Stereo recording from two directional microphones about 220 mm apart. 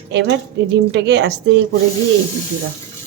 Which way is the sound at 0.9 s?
50° right (ahead or behind).